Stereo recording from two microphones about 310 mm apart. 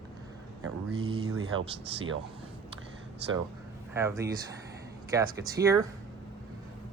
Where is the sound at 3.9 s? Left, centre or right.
Centre.